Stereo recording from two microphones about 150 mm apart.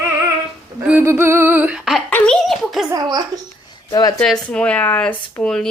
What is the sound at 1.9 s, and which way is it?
Speech, 5° left (ahead or behind).